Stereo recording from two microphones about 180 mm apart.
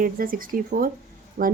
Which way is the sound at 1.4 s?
60° right (ahead or behind).